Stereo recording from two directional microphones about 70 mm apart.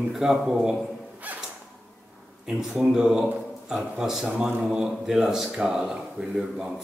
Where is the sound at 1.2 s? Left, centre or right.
Right.